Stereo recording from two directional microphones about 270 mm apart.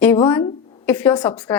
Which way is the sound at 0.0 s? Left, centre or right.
Centre.